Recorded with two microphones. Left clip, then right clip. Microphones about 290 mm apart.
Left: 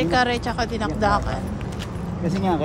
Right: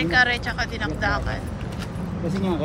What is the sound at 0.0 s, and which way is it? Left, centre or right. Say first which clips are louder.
Speech: right 1 dB; centre.